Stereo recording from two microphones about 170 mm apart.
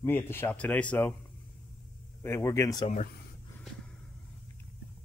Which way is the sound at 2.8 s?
45° left (ahead or behind).